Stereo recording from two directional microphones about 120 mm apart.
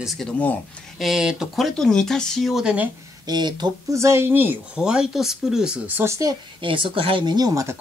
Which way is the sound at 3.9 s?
25° right (ahead or behind).